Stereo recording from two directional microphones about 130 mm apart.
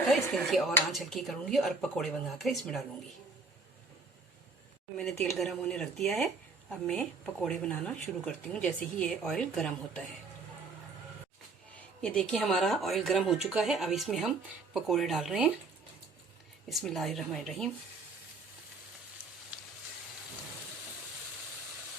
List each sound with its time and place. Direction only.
0.3 s speech: 5° left (ahead or behind)
5.1 s speech: 20° left (ahead or behind)
5.4 s speech: centre (ahead or behind)
12.0 s speech: 5° left (ahead or behind)
16.6 s speech: centre (ahead or behind)